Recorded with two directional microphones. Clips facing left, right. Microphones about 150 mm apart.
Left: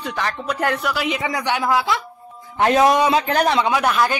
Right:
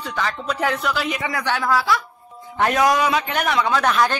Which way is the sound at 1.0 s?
20° left (ahead or behind).